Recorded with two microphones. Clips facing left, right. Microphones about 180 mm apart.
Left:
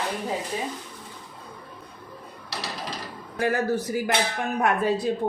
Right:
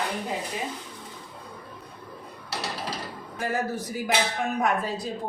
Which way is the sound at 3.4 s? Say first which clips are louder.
Left 5 dB; 70° left (ahead or behind).